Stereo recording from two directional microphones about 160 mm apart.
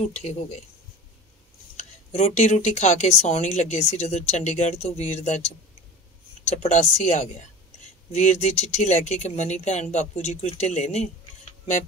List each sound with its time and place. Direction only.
2.1 s speech: 45° left (ahead or behind)